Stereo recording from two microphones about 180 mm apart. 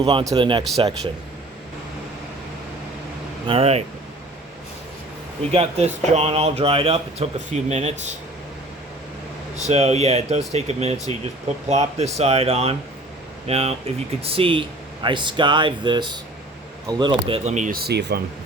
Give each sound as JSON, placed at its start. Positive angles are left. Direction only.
{"t": 0.0, "sound": "speech", "side_deg": -25}
{"t": 3.4, "sound": "speech", "side_deg": -30}
{"t": 5.5, "sound": "speech", "side_deg": -35}
{"t": 9.6, "sound": "speech", "side_deg": -40}